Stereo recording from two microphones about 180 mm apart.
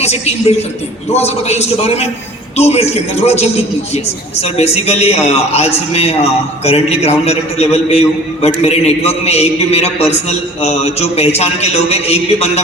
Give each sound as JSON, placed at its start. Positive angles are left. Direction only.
{"t": 0.0, "sound": "a man's voice", "side_deg": 35}